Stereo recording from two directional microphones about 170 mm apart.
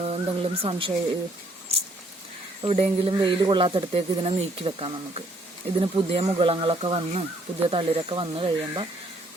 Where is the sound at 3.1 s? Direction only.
25° right (ahead or behind).